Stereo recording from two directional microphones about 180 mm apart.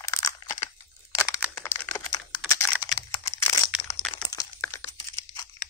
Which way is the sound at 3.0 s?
30° left (ahead or behind).